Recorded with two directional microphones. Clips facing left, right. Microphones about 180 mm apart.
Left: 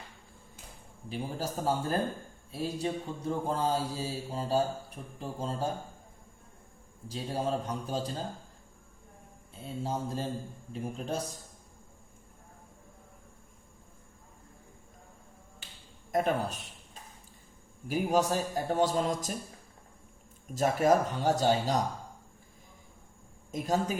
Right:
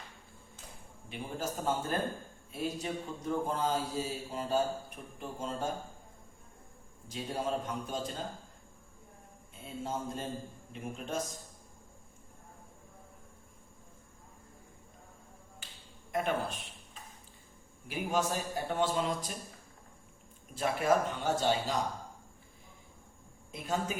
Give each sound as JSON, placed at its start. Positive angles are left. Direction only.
{"t": 1.1, "sound": "mantra", "side_deg": 35}
{"t": 7.1, "sound": "mantra", "side_deg": 35}
{"t": 9.6, "sound": "mantra", "side_deg": 30}
{"t": 16.1, "sound": "a man's voice", "side_deg": 40}
{"t": 17.8, "sound": "mantra", "side_deg": 40}
{"t": 20.5, "sound": "mantra", "side_deg": 45}
{"t": 23.5, "sound": "mantra", "side_deg": 40}